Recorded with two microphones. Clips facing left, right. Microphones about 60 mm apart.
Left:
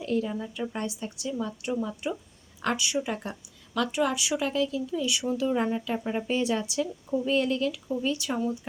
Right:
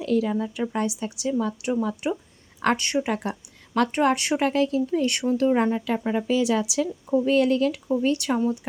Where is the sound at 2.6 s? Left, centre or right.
Right.